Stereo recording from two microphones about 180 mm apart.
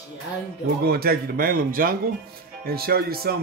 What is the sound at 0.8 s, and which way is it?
Speech, 60° right (ahead or behind).